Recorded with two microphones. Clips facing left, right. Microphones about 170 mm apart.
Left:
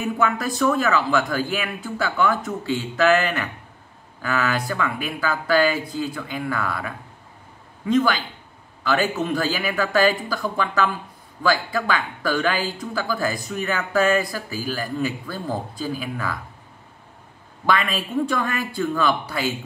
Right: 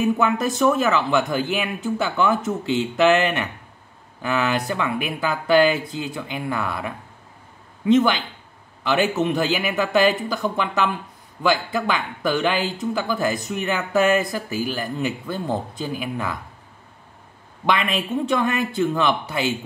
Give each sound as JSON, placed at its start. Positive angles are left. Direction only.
{"t": 0.2, "sound": "speech", "side_deg": -20}
{"t": 8.8, "sound": "speech", "side_deg": -20}
{"t": 17.6, "sound": "speech", "side_deg": -20}